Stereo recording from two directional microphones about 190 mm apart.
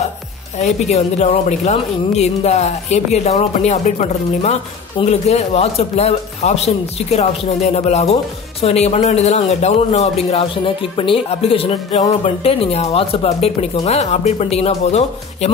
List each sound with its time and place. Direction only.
0.6 s speech: 35° left (ahead or behind)